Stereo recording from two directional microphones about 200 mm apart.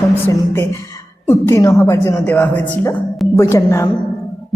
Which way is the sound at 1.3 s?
15° left (ahead or behind).